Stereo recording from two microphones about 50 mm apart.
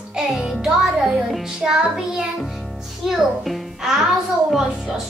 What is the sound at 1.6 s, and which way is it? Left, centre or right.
Child singing, centre.